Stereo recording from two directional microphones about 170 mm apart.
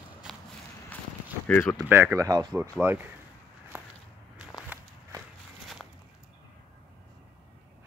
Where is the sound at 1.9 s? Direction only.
15° right (ahead or behind).